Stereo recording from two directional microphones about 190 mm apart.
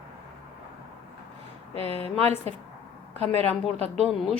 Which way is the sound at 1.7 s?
30° right (ahead or behind).